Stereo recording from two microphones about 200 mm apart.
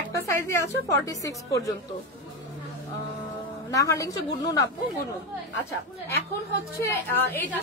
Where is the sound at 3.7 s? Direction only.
15° left (ahead or behind).